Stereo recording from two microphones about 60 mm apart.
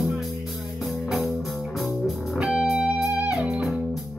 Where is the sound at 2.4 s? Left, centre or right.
Centre.